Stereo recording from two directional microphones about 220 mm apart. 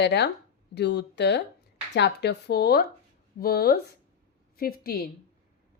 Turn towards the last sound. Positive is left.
turn(degrees=45)  # may be behind; listen again after turning